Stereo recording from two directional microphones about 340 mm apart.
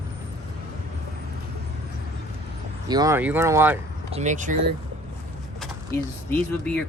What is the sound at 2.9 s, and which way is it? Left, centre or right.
Speech, centre.